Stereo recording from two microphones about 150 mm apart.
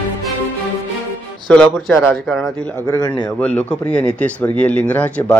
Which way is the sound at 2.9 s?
25° left (ahead or behind).